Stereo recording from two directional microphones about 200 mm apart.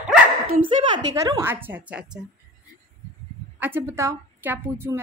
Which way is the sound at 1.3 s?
10° right (ahead or behind).